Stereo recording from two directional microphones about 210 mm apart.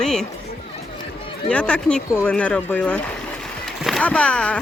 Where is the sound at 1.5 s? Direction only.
5° left (ahead or behind).